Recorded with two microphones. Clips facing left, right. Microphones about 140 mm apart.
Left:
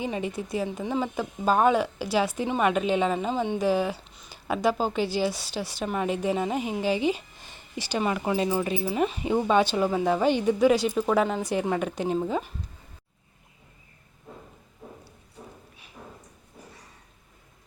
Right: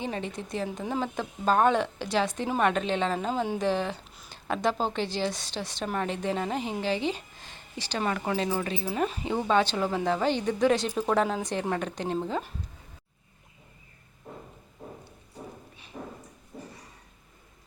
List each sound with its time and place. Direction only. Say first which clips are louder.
0.0 s speech: left 3 dB; 10° left (ahead or behind)
8.9 s speech: left 1 dB; centre (ahead or behind)
9.2 s speech: left 3 dB; 15° left (ahead or behind)